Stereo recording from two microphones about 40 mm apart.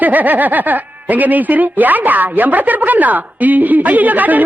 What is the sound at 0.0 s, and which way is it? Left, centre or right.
Speech, right.